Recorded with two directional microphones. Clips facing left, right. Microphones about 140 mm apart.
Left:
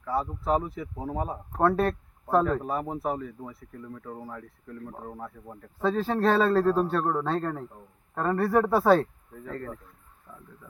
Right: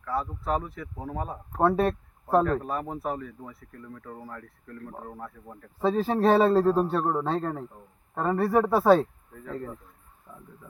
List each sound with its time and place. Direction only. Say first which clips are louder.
0.0 s speech: left 1 dB; 15° left (ahead or behind)
1.5 s a man's voice: right 1 dB; 10° right (ahead or behind)
2.3 s speech: right 1 dB; 5° left (ahead or behind)
5.8 s a man's voice: right 2 dB; 10° right (ahead or behind)
10.3 s a man's voice: right 1 dB; 15° right (ahead or behind)